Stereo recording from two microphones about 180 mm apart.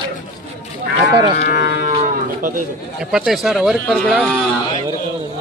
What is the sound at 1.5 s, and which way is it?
A man's voice, 60° right (ahead or behind).